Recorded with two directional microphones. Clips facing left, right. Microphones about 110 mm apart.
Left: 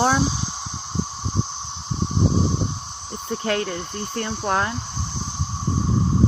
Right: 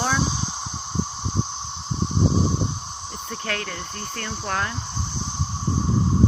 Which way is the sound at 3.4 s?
25° left (ahead or behind).